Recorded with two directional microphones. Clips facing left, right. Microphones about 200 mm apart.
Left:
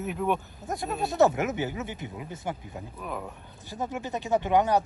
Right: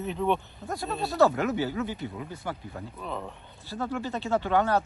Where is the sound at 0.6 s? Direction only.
20° left (ahead or behind).